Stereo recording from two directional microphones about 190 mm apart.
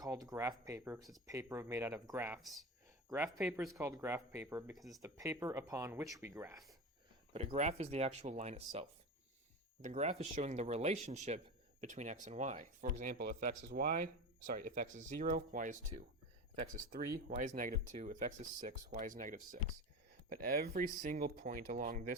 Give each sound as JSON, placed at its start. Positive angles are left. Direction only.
{"t": 0.0, "sound": "speech", "side_deg": -20}
{"t": 2.4, "sound": "speech", "side_deg": 0}
{"t": 3.1, "sound": "speech", "side_deg": -15}
{"t": 3.4, "sound": "speech", "side_deg": -5}
{"t": 3.8, "sound": "speech", "side_deg": -15}
{"t": 7.3, "sound": "speech", "side_deg": -35}